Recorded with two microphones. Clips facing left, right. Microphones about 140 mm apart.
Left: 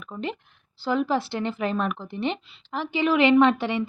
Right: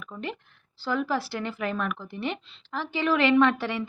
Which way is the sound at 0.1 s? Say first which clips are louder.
Left 4 dB; 20° left (ahead or behind).